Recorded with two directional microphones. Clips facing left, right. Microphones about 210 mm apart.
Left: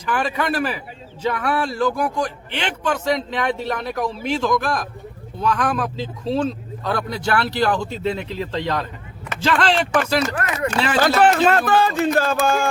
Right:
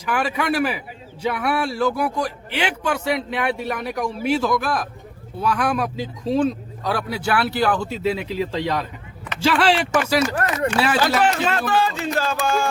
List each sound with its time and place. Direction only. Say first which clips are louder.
0.0 s speech: even; 10° right (ahead or behind)
11.2 s music: left 5 dB; 50° left (ahead or behind)